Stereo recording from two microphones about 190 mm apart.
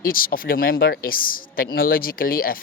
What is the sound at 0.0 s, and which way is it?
Speech, 50° left (ahead or behind).